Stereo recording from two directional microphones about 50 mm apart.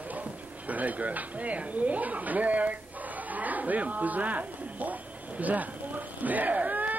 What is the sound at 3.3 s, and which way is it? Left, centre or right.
Livestock, right.